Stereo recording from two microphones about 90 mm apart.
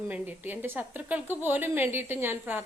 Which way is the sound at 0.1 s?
20° right (ahead or behind).